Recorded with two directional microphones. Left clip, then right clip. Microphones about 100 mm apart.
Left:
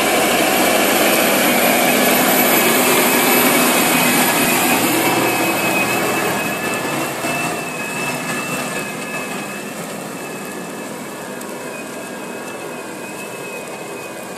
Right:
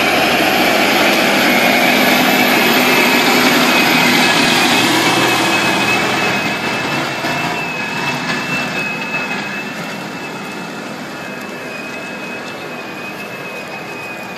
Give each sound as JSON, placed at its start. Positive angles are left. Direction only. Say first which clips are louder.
{"t": 0.0, "sound": "vehicle", "louder": "right 2 dB", "side_deg": 10}
{"t": 8.1, "sound": "vehicle", "louder": "right 4 dB", "side_deg": 25}